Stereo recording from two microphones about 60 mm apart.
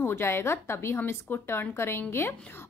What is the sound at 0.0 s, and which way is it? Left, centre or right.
A woman's voice, left.